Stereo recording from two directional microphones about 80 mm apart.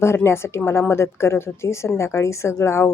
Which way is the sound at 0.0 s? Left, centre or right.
Left.